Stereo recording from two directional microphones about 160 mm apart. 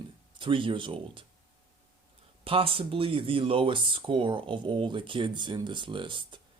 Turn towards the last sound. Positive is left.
turn(degrees=-30)  # may be behind; listen again after turning